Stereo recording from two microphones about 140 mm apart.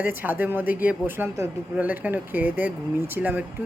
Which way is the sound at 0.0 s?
15° right (ahead or behind).